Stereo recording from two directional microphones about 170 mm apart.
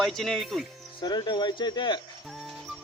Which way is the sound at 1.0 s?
25° left (ahead or behind).